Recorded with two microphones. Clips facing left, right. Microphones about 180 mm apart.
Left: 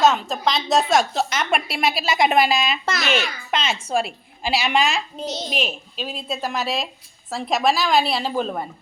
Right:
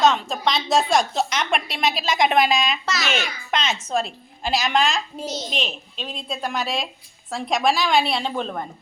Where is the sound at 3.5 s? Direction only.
5° left (ahead or behind).